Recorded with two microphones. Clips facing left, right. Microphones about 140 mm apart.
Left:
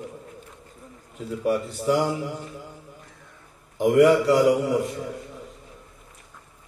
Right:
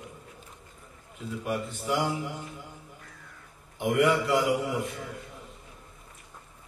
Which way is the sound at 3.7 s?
40° left (ahead or behind).